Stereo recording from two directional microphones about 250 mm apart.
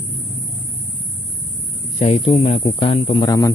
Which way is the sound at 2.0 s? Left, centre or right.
Left.